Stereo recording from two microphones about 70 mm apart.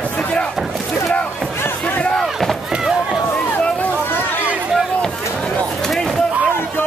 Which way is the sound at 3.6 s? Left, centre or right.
Left.